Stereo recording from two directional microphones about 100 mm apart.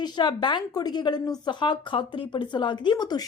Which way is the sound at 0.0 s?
50° left (ahead or behind).